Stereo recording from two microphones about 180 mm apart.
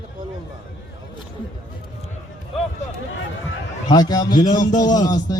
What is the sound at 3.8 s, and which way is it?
Music, 20° left (ahead or behind).